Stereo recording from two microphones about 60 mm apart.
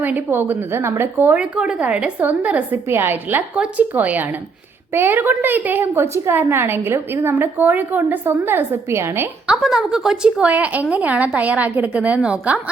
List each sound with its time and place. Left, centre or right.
0.0 s a woman's voice: right
1.4 s a woman's voice: centre
2.8 s a woman's voice: right
3.5 s a woman's voice: centre; by 9.3 s right
9.6 s a woman's voice: centre
10.2 s a woman's voice: right